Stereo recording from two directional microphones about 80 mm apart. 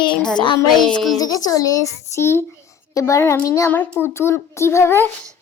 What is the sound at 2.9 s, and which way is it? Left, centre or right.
A child's voice, left.